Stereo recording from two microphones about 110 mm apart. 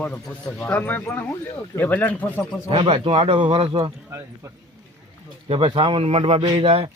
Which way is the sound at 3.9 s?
25° right (ahead or behind).